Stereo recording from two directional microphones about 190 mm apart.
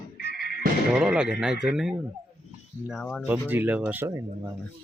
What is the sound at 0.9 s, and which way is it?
Speech, 5° right (ahead or behind).